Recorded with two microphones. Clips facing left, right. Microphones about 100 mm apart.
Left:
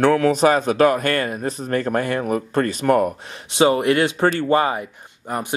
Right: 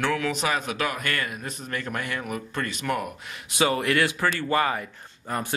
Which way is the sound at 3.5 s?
25° left (ahead or behind).